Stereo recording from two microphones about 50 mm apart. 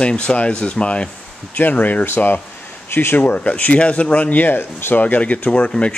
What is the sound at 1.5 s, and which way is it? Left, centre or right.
Speech, left.